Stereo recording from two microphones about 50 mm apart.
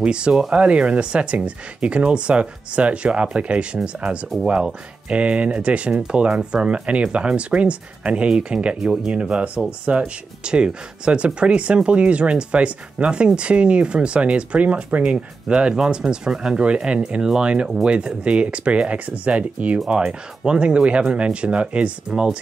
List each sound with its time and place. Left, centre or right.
0.0 s speech: centre